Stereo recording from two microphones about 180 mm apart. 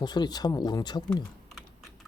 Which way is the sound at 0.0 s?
25° left (ahead or behind).